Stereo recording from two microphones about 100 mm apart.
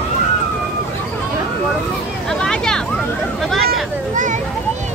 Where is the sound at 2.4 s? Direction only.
5° left (ahead or behind).